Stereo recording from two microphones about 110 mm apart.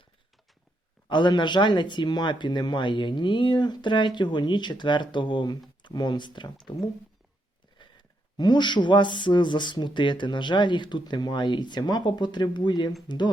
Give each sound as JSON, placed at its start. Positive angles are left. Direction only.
{"t": 1.1, "sound": "speech", "side_deg": 45}
{"t": 7.8, "sound": "speech", "side_deg": 45}